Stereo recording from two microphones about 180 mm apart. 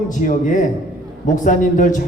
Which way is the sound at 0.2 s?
45° left (ahead or behind).